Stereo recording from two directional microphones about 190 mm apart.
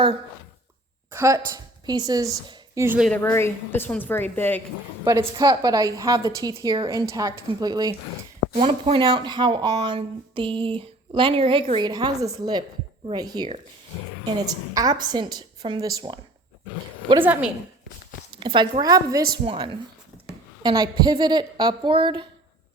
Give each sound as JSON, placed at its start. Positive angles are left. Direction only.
{"t": 1.1, "sound": "a woman's voice", "side_deg": -15}
{"t": 3.0, "sound": "a woman's voice", "side_deg": 5}
{"t": 5.0, "sound": "speech", "side_deg": -20}
{"t": 18.3, "sound": "speech", "side_deg": -25}